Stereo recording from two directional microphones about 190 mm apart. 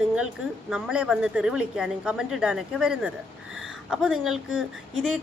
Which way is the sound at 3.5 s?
90° right.